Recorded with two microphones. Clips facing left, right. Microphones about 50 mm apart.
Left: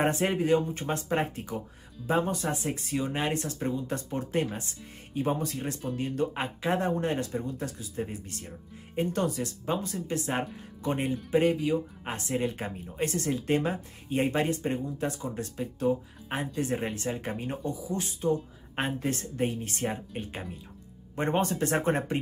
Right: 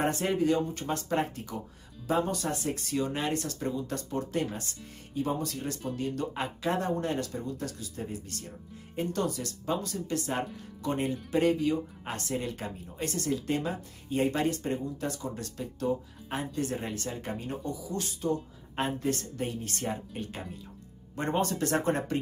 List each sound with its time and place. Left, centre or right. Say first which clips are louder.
0.0 s speech: left 1 dB; left